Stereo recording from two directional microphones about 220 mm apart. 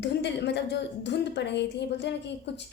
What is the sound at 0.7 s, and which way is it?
A woman's voice, 50° left (ahead or behind).